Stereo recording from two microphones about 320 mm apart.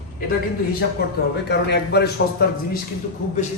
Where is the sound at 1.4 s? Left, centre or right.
Left.